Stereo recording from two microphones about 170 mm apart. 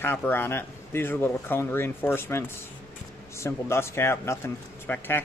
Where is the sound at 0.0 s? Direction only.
10° left (ahead or behind).